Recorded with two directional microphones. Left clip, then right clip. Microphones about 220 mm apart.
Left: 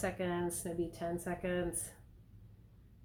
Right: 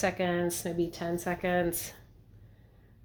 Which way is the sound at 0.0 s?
35° right (ahead or behind).